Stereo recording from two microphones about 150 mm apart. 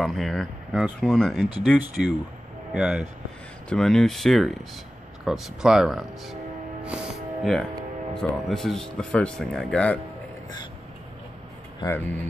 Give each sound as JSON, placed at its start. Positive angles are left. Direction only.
{"t": 0.0, "sound": "speech", "side_deg": 0}
{"t": 2.7, "sound": "speech", "side_deg": -5}
{"t": 11.8, "sound": "speech", "side_deg": 15}